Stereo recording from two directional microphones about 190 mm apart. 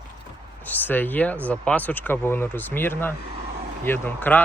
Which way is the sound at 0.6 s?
10° left (ahead or behind).